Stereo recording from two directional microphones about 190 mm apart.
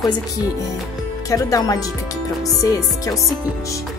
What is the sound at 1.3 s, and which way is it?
Speech, 20° left (ahead or behind).